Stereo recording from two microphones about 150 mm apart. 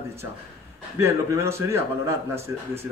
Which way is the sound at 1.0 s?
20° right (ahead or behind).